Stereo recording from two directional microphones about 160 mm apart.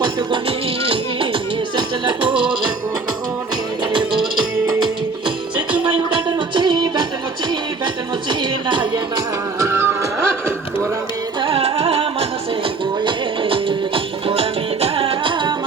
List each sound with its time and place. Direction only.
0.9 s music: 30° right (ahead or behind)
6.2 s music: 30° right (ahead or behind)
8.3 s music: 30° right (ahead or behind)
9.6 s music: 15° right (ahead or behind)
11.3 s music: 35° right (ahead or behind)
13.1 s music: 30° right (ahead or behind)